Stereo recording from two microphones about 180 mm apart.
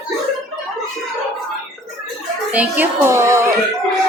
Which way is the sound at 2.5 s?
10° right (ahead or behind).